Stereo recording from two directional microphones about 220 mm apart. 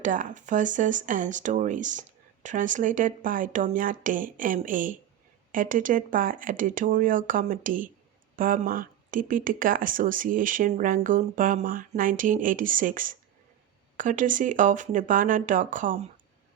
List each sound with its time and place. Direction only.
0.0 s speech: 35° right (ahead or behind)